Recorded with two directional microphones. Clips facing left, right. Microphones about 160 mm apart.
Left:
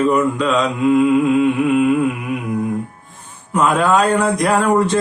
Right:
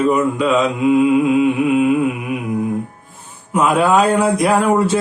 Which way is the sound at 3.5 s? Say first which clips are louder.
Right 1 dB; 10° right (ahead or behind).